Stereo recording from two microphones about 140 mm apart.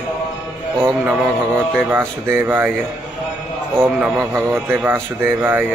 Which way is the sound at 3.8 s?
5° right (ahead or behind).